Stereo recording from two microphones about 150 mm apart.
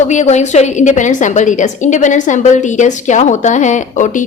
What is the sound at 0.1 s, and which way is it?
A woman's voice, 50° left (ahead or behind).